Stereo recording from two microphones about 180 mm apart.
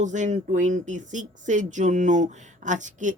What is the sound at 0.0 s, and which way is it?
Speech, 40° right (ahead or behind).